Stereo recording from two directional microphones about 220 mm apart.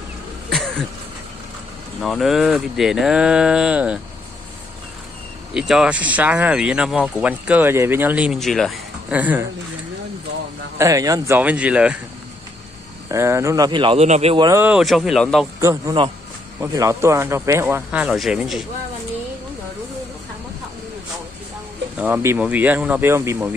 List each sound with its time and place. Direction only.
0.5 s throat clearing: centre (ahead or behind)
2.0 s speech: centre (ahead or behind)
5.5 s speech: 5° right (ahead or behind)
10.8 s speech: 15° right (ahead or behind)
13.1 s speech: 10° right (ahead or behind)
14.5 s speech: 5° right (ahead or behind)
15.6 s speech: 15° right (ahead or behind)
21.9 s speech: 10° right (ahead or behind)